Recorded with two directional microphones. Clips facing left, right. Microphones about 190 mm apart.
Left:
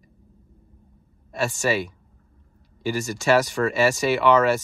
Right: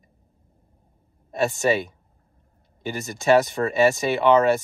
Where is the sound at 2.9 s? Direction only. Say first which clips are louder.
Right 2 dB; 20° right (ahead or behind).